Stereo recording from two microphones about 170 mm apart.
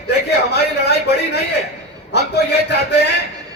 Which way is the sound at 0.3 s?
80° left.